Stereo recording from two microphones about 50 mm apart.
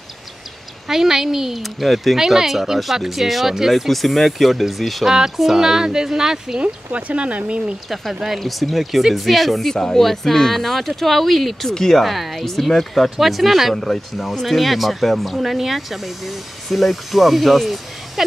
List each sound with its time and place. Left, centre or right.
0.8 s speech: centre
6.6 s speech: right
7.9 s speech: centre
12.0 s speech: centre